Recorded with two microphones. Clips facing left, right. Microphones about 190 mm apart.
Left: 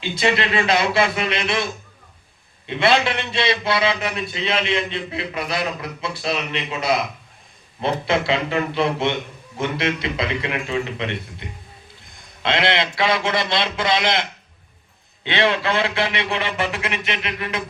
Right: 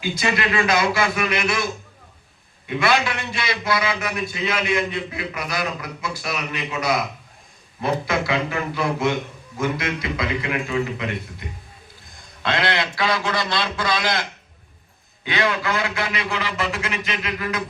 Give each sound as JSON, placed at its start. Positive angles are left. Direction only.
{"t": 0.0, "sound": "a man's voice", "side_deg": 25}
{"t": 2.6, "sound": "a man's voice", "side_deg": 25}